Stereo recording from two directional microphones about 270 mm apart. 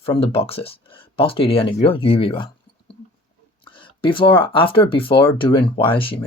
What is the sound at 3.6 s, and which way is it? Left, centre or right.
Speech, centre.